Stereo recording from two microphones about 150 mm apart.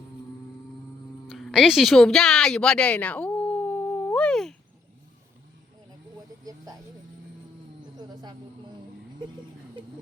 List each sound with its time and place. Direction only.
1.3 s a sound: centre (ahead or behind)
6.1 s insect: 25° right (ahead or behind)
7.9 s music: 25° right (ahead or behind)